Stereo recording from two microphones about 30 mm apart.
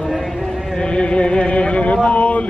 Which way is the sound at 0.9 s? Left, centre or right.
Left.